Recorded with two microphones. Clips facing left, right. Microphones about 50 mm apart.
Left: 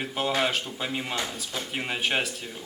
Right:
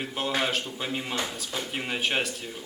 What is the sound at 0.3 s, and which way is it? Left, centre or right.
Speech, centre.